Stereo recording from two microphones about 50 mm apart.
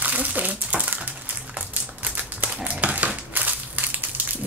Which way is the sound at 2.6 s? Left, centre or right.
Right.